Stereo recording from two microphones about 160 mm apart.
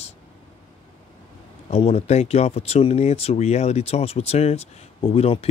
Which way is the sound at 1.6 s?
40° left (ahead or behind).